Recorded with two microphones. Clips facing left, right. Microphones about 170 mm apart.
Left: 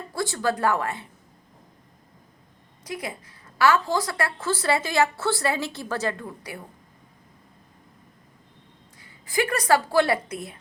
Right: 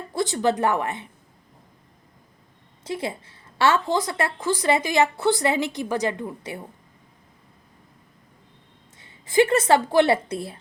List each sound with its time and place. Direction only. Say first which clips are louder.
0.1 s a woman's voice: right 4 dB; 20° right (ahead or behind)
2.8 s a woman's voice: right 4 dB; 25° right (ahead or behind)
9.0 s speech: right 7 dB; 25° right (ahead or behind)